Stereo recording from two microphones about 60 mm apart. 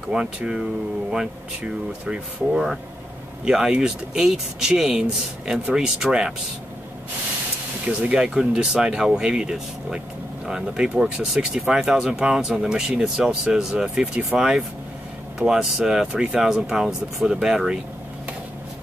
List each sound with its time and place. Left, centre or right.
0.1 s speech: centre
3.4 s speech: centre
8.0 s speech: centre
16.1 s speech: centre
16.3 s speech: centre